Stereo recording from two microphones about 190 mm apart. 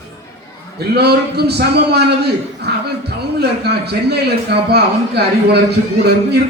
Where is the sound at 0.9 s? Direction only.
60° right (ahead or behind).